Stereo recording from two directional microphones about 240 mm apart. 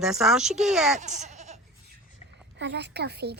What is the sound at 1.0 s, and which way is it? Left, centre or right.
Goat, right.